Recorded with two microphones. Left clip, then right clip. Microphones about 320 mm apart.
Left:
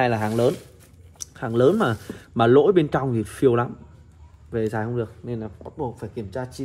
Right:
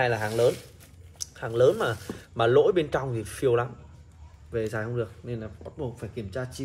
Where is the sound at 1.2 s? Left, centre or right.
Centre.